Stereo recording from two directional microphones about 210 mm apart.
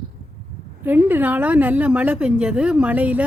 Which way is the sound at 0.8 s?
10° right (ahead or behind).